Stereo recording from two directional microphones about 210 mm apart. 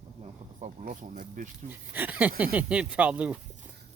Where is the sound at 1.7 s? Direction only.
10° right (ahead or behind).